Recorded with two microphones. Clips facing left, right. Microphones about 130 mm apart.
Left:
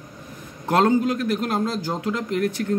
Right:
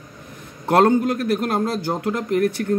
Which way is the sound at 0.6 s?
55° right (ahead or behind).